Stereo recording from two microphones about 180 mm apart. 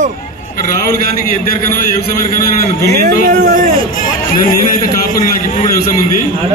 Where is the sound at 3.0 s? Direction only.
50° right (ahead or behind).